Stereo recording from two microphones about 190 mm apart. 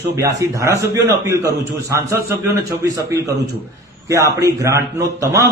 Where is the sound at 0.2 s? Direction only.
15° right (ahead or behind).